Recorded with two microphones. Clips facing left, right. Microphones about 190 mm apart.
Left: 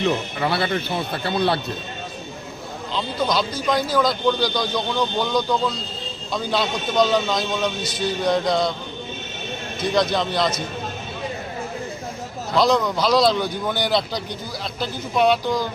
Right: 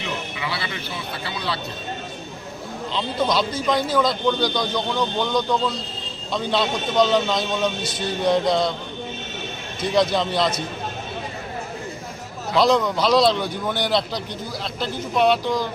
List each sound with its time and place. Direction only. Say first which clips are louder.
0.0 s speech: left 7 dB; 55° left (ahead or behind)
2.9 s speech: even; centre (ahead or behind)
7.9 s music: left 2 dB; 25° right (ahead or behind)
8.2 s speech: right 2 dB; centre (ahead or behind)
9.9 s speech: right 1 dB; 5° right (ahead or behind)
12.5 s speech: even; centre (ahead or behind)